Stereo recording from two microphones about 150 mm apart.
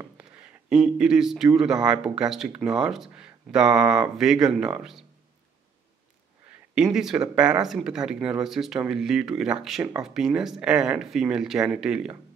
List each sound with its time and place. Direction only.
0.2 s a sound: 5° right (ahead or behind)
1.6 s speech: 5° right (ahead or behind)
6.7 s speech: 5° right (ahead or behind)